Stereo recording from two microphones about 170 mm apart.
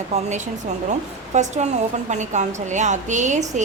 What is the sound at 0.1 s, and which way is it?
A woman's voice, 45° right (ahead or behind).